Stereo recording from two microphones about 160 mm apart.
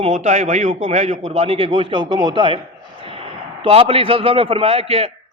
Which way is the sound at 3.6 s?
35° right (ahead or behind).